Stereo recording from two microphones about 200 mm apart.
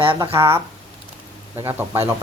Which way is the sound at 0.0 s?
25° right (ahead or behind).